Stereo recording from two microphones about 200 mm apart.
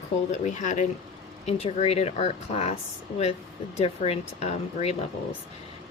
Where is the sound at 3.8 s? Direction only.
30° left (ahead or behind).